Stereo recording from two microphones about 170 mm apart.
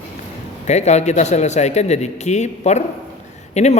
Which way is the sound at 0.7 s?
40° left (ahead or behind).